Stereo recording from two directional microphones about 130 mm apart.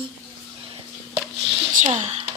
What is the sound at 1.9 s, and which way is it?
Speech, 55° right (ahead or behind).